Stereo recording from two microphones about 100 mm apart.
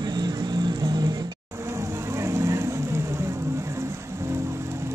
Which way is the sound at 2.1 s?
30° right (ahead or behind).